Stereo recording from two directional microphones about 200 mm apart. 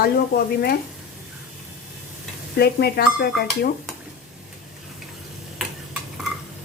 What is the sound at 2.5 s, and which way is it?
Speech, 50° left (ahead or behind).